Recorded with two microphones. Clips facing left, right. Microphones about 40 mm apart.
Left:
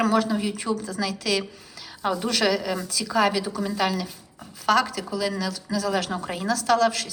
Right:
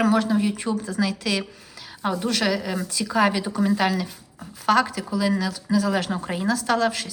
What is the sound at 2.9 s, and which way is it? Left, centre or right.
Speech, right.